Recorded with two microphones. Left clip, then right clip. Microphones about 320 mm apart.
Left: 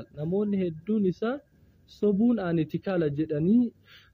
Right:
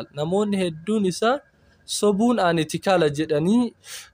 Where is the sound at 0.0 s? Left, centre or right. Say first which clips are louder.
Right 7 dB; centre.